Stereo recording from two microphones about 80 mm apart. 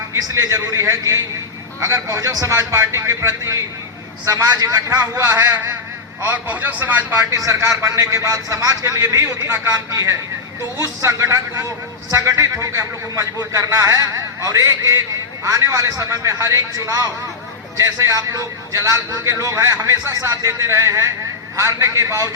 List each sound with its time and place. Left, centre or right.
0.1 s a man's voice: right
6.2 s a man's voice: right
7.3 s a man's voice: right